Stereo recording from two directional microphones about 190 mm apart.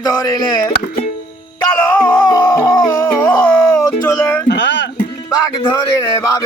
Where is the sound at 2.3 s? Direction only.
15° left (ahead or behind).